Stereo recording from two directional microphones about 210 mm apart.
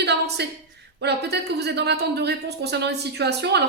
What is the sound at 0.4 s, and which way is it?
Speech, 55° right (ahead or behind).